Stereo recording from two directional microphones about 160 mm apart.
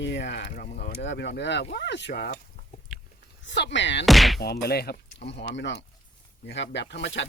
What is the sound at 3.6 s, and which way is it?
Speech, 90° left.